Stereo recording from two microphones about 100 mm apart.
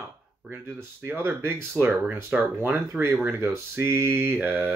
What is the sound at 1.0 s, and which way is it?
Mantra, 20° right (ahead or behind).